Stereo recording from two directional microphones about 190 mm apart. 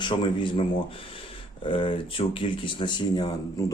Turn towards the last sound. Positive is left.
turn(degrees=20)  # may be behind; listen again after turning